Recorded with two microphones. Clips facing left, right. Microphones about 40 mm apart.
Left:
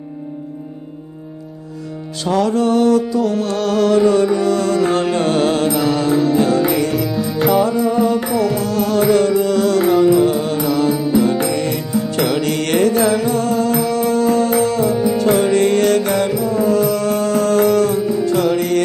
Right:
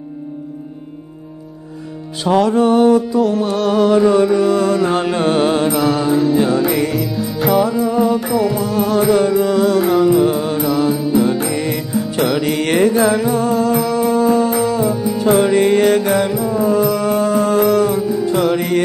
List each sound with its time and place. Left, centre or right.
2.5 s music: centre
8.3 s music: centre